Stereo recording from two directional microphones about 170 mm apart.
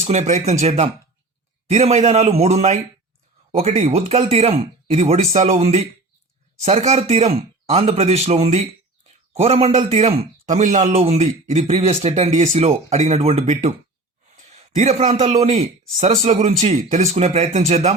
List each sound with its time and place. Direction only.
0.0 s a man's voice: 40° right (ahead or behind)